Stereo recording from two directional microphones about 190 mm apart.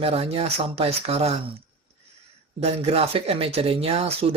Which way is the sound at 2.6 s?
30° right (ahead or behind).